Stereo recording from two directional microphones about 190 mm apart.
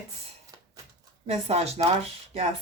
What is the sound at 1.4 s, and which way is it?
Speech, 35° right (ahead or behind).